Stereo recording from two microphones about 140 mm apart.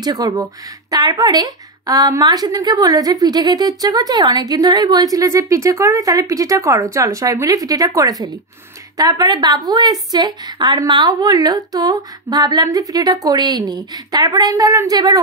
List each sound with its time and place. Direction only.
0.0 s speech: 25° right (ahead or behind)